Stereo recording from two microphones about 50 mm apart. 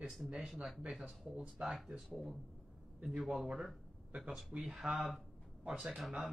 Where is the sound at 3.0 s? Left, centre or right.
Right.